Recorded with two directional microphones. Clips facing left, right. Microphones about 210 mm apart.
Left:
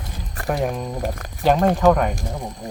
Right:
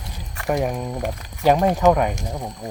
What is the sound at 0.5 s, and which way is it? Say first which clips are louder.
Speech: right 1 dB; centre (ahead or behind).